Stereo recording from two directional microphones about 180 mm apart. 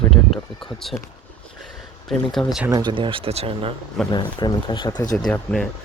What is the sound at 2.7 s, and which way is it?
Speech, 25° right (ahead or behind).